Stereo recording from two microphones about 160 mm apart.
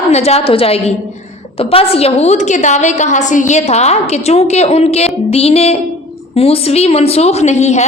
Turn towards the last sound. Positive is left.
turn(degrees=45)  # may be behind; listen again after turning